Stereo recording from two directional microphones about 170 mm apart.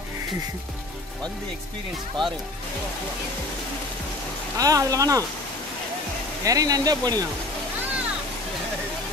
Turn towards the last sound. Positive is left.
turn(degrees=-25)  # may be behind; listen again after turning